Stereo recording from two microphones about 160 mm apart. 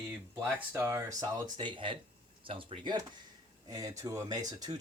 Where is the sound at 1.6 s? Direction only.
30° right (ahead or behind).